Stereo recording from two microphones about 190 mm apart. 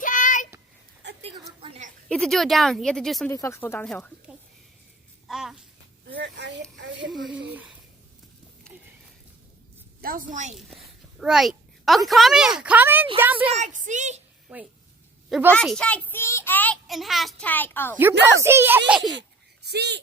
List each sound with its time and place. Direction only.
0.0 s a sound: 45° left (ahead or behind)
1.0 s a sound: 70° right (ahead or behind)
2.0 s speech: 5° left (ahead or behind)
3.2 s a child's voice: 15° left (ahead or behind)
5.3 s babbling: centre (ahead or behind)
6.1 s a sound: 65° right (ahead or behind)
7.1 s speech: centre (ahead or behind)
10.0 s a woman's voice: 45° right (ahead or behind)
10.5 s a child's voice: centre (ahead or behind)
13.5 s a woman's voice: 40° right (ahead or behind)
14.4 s a woman's voice: 5° right (ahead or behind)
15.5 s a child's voice: 5° left (ahead or behind)
17.9 s speech: 10° right (ahead or behind)
19.6 s speech: 60° right (ahead or behind)